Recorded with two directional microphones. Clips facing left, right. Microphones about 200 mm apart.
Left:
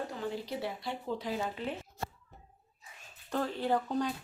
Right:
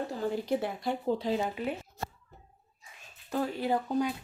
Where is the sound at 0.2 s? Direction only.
45° right (ahead or behind).